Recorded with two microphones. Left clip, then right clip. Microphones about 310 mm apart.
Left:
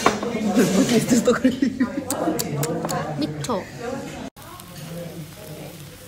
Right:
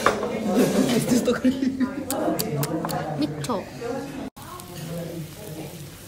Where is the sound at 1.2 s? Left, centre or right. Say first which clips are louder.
Left 3 dB; left.